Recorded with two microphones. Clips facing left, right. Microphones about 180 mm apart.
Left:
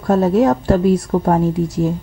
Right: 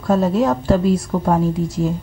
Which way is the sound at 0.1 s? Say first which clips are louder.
Left 3 dB; 60° left (ahead or behind).